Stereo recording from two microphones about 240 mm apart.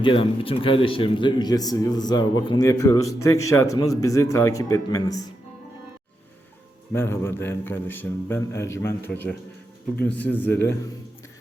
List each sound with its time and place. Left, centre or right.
0.0 s a man's voice: left
6.9 s a man's voice: centre